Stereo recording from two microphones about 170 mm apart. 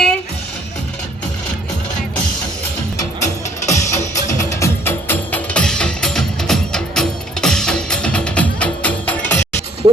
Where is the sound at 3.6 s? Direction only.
45° left (ahead or behind).